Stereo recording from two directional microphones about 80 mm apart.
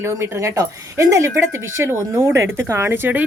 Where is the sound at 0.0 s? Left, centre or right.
Right.